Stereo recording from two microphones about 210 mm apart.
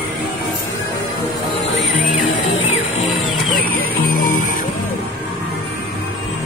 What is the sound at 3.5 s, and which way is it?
Music, 40° left (ahead or behind).